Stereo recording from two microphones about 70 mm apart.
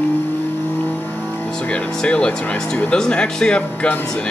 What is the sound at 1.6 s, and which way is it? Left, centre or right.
Speech, centre.